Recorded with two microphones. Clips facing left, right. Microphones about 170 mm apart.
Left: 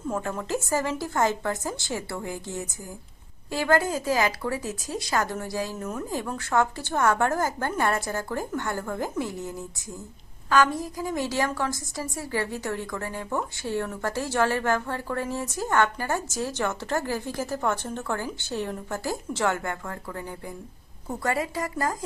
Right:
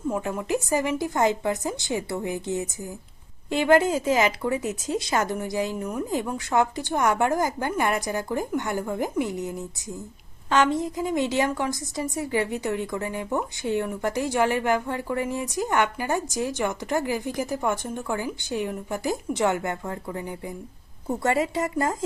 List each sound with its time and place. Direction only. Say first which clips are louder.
0.1 s a woman's voice: right 2 dB; 15° right (ahead or behind)